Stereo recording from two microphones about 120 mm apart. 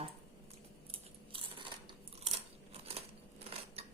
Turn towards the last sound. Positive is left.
turn(degrees=-55)  # may be behind; listen again after turning